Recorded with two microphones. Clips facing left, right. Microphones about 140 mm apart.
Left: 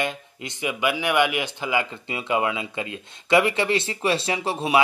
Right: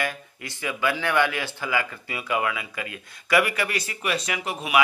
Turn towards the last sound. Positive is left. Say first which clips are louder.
# left 5 dB
turn(degrees=30)  # may be behind; listen again after turning